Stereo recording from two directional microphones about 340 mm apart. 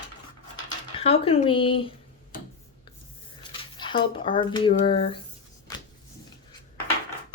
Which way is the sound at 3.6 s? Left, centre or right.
Centre.